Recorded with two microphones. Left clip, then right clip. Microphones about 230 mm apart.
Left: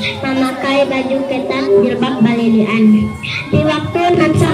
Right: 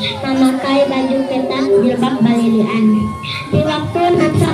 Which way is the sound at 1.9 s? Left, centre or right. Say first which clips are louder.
Even; left.